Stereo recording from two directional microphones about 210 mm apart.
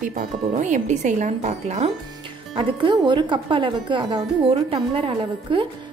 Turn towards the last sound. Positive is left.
turn(degrees=-25)  # may be behind; listen again after turning